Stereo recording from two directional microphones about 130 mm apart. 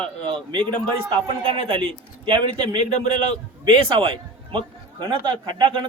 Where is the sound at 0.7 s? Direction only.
40° right (ahead or behind).